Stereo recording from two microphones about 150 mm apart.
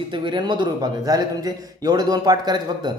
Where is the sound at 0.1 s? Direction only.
30° right (ahead or behind).